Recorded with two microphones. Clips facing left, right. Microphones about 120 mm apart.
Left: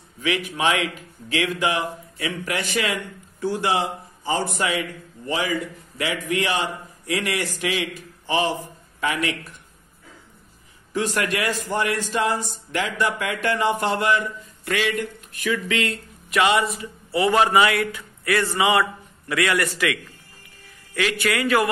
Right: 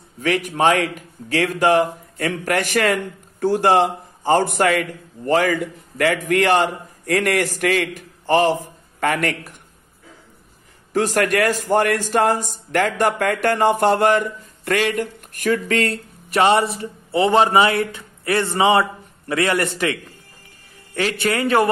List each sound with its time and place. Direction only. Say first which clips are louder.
0.2 s a man's voice: right 5 dB; 45° right (ahead or behind)
10.9 s a man's voice: right 6 dB; 45° right (ahead or behind)
16.8 s a man's voice: right 3 dB; 25° right (ahead or behind)